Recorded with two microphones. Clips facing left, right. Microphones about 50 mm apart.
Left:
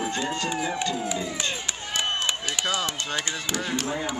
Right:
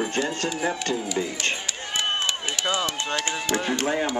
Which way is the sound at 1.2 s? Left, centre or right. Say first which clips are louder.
Right 3 dB; right.